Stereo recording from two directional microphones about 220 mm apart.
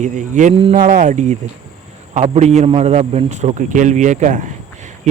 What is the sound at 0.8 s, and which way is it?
Speech, 40° right (ahead or behind).